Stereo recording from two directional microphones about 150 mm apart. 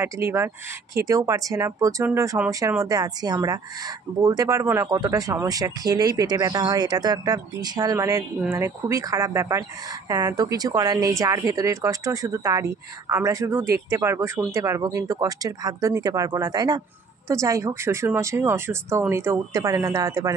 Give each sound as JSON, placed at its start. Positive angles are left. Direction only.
{"t": 0.0, "sound": "speech", "side_deg": -20}
{"t": 2.8, "sound": "speech", "side_deg": -25}